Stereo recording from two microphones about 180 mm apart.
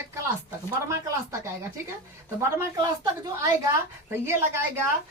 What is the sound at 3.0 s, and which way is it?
Speech, 20° right (ahead or behind).